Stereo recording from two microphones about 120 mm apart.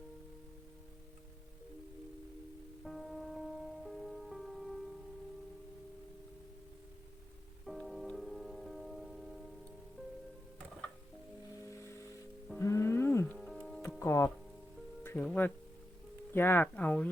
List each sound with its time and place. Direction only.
2.8 s music: centre (ahead or behind)
7.6 s music: centre (ahead or behind)
11.6 s music: 25° left (ahead or behind)
13.3 s music: 5° left (ahead or behind)
14.0 s music: 20° left (ahead or behind)
16.3 s speech: 20° left (ahead or behind)